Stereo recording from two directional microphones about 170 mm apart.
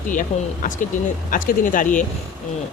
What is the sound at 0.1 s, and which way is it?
Speech, 50° left (ahead or behind).